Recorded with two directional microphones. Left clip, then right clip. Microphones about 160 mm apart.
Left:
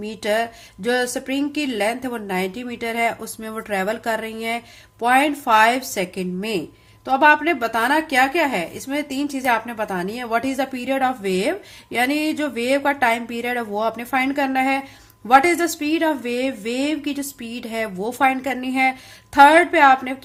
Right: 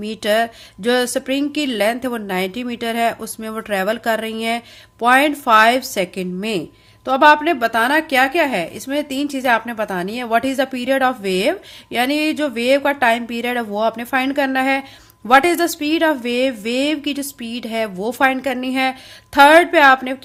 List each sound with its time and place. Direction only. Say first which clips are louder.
0.0 s a woman's voice: right 4 dB; 35° right (ahead or behind)